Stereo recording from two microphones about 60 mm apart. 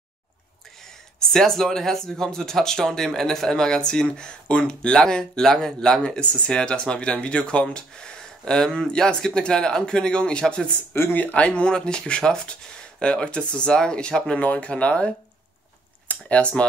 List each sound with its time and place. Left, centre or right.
1.3 s speech: centre